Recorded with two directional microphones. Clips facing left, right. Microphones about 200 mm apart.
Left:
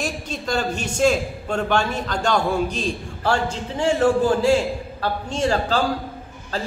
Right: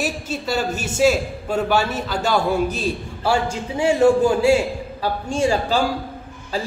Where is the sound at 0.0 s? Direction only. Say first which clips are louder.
Right 2 dB; 5° right (ahead or behind).